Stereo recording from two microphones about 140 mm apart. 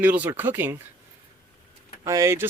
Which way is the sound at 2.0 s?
25° right (ahead or behind).